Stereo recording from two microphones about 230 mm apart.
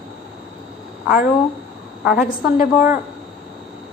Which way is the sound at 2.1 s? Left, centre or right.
Left.